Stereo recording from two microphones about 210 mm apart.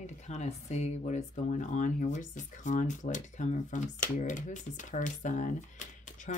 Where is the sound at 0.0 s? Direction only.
35° left (ahead or behind).